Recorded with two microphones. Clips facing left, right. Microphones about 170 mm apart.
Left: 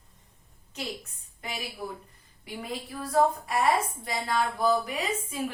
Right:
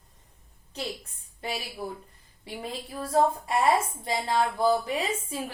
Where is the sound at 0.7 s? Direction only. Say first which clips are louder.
Right 2 dB; 35° right (ahead or behind).